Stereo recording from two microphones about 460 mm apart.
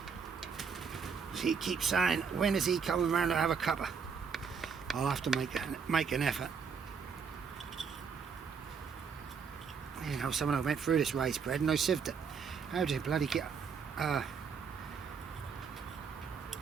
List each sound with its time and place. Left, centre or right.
1.0 s speech: centre
10.0 s speech: centre